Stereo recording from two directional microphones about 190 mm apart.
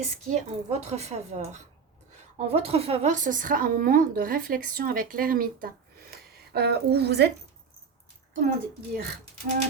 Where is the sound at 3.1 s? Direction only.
45° right (ahead or behind); by 7.3 s 60° right (ahead or behind).